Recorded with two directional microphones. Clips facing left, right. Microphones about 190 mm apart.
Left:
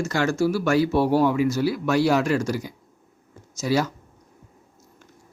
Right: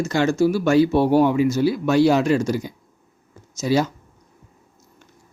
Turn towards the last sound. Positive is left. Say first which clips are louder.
# right 3 dB
turn(degrees=-20)  # may be behind; listen again after turning